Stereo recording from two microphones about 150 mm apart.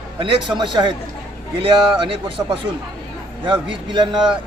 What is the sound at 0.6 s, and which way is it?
Speech, 30° right (ahead or behind).